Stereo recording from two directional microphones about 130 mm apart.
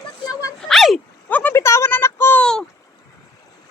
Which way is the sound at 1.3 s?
10° left (ahead or behind).